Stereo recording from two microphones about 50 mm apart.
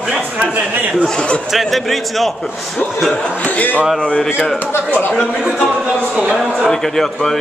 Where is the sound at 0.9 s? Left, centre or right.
Centre.